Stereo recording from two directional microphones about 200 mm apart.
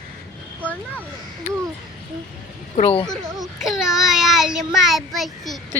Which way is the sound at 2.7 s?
30° left (ahead or behind).